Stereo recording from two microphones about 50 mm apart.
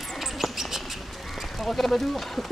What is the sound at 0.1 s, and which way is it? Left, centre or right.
Bird, centre.